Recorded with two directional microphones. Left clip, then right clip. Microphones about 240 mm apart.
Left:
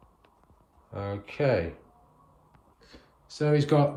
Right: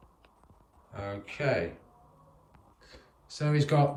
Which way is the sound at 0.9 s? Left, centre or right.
Centre.